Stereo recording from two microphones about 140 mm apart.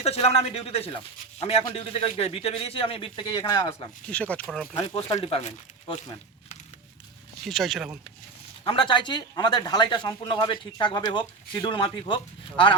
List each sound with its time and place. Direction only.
0.0 s a man's voice: 45° left (ahead or behind)
4.1 s speech: 10° left (ahead or behind)
4.4 s speech: centre (ahead or behind)
5.2 s a man's voice: 50° left (ahead or behind)
7.4 s speech: centre (ahead or behind)
8.6 s speech: 35° left (ahead or behind)